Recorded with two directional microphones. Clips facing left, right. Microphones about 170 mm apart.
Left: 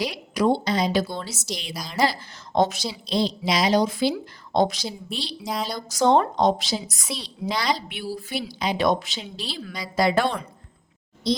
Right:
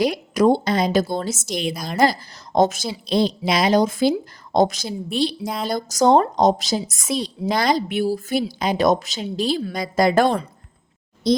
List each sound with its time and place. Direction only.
0.0 s a woman's voice: 45° right (ahead or behind)